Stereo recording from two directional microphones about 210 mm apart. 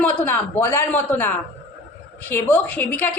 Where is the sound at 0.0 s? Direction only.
5° left (ahead or behind).